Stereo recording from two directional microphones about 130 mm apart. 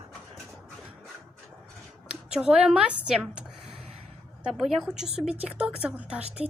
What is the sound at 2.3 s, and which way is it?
A woman's voice, 5° right (ahead or behind).